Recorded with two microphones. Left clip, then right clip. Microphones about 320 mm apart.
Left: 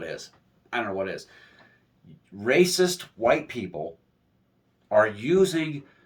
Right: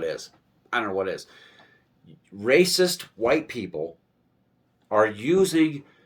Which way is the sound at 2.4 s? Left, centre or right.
Centre.